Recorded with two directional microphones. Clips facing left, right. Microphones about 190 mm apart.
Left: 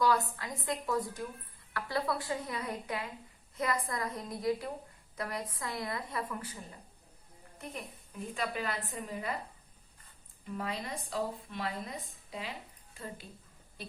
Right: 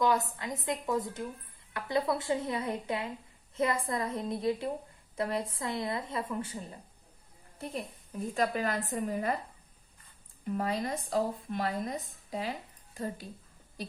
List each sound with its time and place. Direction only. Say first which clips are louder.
0.0 s a woman's voice: right 1 dB; 20° right (ahead or behind); by 9.3 s 45° right (ahead or behind)
10.4 s speech: right 6 dB; 45° right (ahead or behind)